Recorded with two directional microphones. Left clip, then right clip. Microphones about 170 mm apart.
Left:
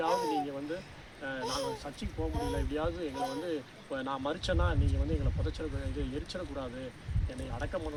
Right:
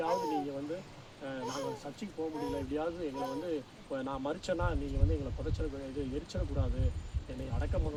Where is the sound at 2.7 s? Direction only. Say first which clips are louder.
Left 2 dB; 15° right (ahead or behind).